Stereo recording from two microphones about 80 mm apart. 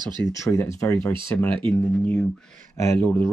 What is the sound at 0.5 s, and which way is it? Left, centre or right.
Speech, left.